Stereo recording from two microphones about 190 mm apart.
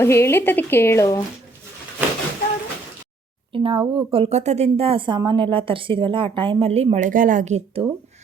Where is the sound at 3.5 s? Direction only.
25° right (ahead or behind).